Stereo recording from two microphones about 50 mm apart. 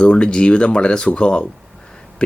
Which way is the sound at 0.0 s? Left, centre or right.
Centre.